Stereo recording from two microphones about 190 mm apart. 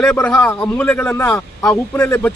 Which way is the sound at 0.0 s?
5° left (ahead or behind).